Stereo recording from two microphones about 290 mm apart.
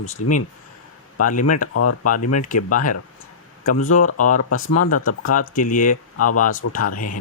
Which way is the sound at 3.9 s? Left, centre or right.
Left.